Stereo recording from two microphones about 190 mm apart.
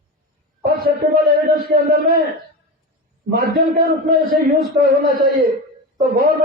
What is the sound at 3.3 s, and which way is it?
A man's voice, 50° right (ahead or behind).